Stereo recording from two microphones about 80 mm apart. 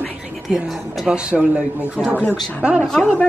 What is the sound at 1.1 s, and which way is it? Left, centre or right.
Speech, centre.